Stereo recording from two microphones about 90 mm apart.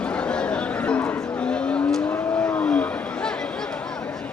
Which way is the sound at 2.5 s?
15° left (ahead or behind).